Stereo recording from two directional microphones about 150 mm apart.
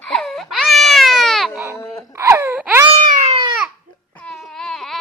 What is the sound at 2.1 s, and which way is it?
Baby cry, 20° right (ahead or behind).